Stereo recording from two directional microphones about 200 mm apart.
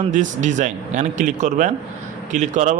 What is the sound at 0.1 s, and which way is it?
Speech, 40° right (ahead or behind).